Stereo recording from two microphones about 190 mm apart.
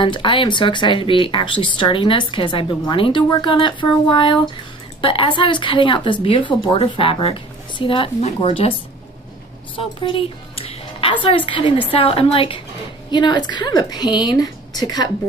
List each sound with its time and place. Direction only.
0.0 s speech: 25° left (ahead or behind)
9.8 s a woman's voice: 25° left (ahead or behind)